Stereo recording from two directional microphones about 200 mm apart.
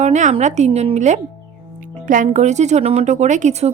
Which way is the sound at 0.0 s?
35° right (ahead or behind).